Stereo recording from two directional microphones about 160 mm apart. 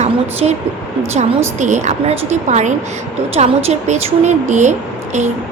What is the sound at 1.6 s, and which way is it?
Speech, 50° right (ahead or behind).